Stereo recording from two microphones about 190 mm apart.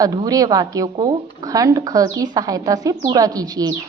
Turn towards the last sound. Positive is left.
turn(degrees=-20)  # may be behind; listen again after turning